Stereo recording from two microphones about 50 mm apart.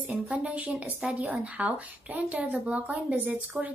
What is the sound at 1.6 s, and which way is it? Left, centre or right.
Speech, right.